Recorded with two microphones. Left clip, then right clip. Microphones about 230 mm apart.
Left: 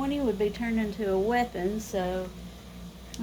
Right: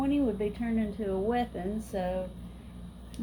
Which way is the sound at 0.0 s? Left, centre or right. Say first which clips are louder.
Left 2 dB; left.